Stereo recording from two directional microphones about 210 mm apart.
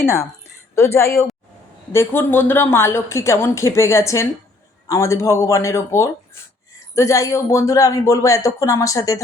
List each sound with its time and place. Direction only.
0.8 s a woman's voice: 10° left (ahead or behind)